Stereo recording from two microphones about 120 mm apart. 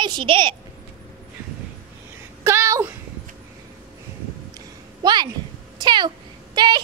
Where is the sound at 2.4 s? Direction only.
25° right (ahead or behind).